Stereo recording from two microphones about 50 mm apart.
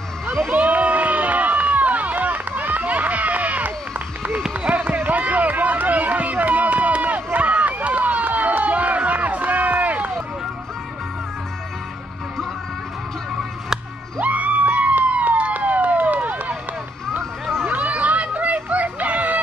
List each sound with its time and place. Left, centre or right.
0.5 s run: right
14.2 s a sound: right
17.6 s children playing: right